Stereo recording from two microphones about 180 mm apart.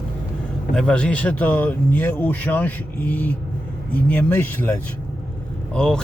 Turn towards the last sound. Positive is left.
turn(degrees=5)  # may be behind; listen again after turning